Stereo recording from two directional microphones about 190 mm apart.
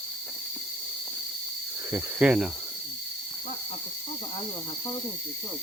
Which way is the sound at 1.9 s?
5° right (ahead or behind).